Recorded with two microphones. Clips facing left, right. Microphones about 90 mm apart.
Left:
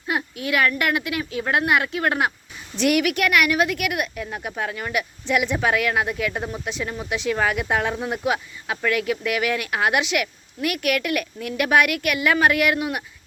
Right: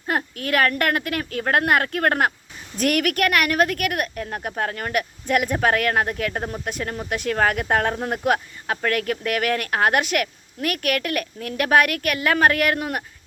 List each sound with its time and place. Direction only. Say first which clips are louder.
0.1 s speech: right 1 dB; 45° right (ahead or behind)